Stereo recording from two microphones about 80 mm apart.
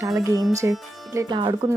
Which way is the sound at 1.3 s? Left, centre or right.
Right.